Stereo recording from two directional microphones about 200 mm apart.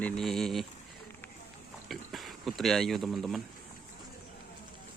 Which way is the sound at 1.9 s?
Centre (ahead or behind).